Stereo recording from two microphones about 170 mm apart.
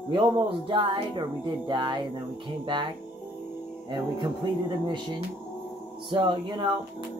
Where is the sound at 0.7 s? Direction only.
30° right (ahead or behind).